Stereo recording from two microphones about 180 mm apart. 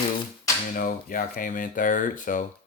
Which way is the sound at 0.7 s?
50° left (ahead or behind).